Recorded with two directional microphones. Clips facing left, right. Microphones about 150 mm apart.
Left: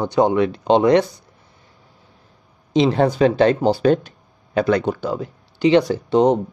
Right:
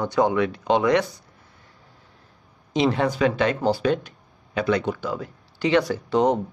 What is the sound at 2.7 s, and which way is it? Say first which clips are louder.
Speech: left 5 dB; 30° left (ahead or behind).